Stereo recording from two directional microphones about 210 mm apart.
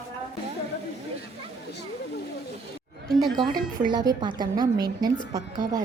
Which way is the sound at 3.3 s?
20° right (ahead or behind).